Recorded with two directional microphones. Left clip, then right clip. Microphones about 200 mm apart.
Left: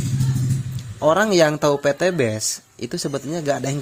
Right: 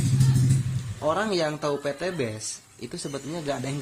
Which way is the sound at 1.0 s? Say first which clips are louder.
Left 9 dB; 40° left (ahead or behind).